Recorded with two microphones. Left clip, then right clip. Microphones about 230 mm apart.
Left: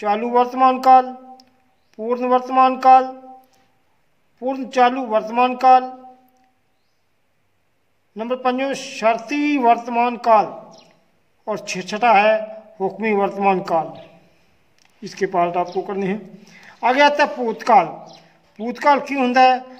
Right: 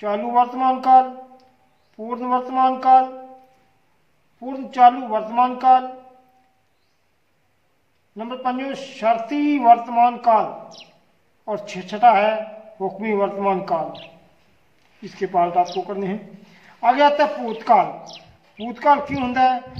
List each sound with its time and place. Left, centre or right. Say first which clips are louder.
0.0 s a man's voice: left 1 dB; left
4.5 s a man's voice: right 2 dB; left
8.2 s a man's voice: left 5 dB; left
15.0 s a man's voice: left 1 dB; left